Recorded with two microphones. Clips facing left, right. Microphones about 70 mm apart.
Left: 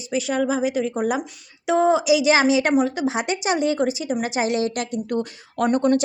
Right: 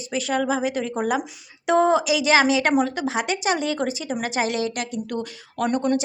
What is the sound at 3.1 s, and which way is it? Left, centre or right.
Speech, left.